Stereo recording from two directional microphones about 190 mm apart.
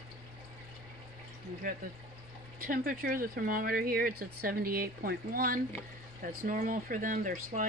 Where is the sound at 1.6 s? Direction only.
50° right (ahead or behind).